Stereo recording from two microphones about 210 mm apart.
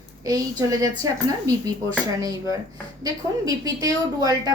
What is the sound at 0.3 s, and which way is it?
A woman's voice, 15° right (ahead or behind).